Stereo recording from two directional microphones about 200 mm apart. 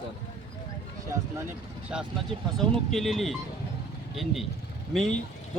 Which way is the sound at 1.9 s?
5° right (ahead or behind).